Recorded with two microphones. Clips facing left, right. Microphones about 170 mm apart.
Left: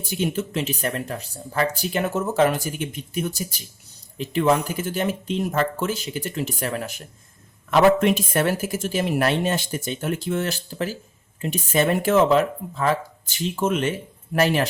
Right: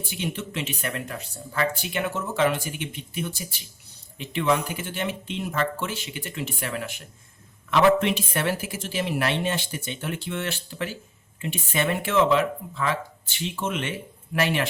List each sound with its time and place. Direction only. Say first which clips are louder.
0.0 s speech: left 6 dB; 40° left (ahead or behind)